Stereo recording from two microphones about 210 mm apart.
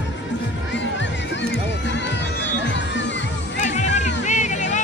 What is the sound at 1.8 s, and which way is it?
Music, 55° left (ahead or behind).